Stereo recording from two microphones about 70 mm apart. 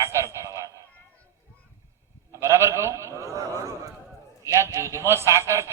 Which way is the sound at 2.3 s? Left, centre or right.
Right.